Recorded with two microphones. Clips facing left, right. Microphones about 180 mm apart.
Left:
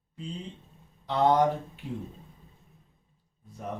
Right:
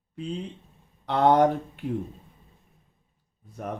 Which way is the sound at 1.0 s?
65° right (ahead or behind).